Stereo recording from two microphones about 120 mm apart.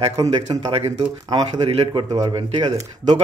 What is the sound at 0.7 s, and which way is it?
Speech, 55° right (ahead or behind).